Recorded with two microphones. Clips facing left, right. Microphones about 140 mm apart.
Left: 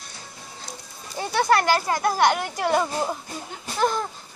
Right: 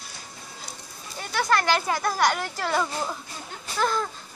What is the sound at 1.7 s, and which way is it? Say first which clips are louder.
Speech: left 3 dB; 10° left (ahead or behind).